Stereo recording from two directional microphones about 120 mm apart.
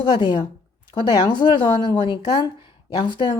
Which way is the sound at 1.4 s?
45° left (ahead or behind).